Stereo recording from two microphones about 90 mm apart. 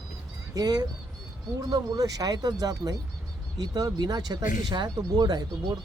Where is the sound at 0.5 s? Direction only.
45° right (ahead or behind).